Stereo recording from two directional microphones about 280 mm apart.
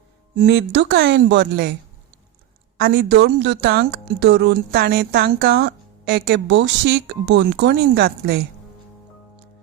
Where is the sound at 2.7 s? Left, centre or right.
Right.